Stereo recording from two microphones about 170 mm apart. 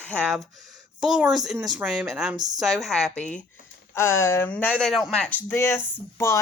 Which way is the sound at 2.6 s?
Centre (ahead or behind).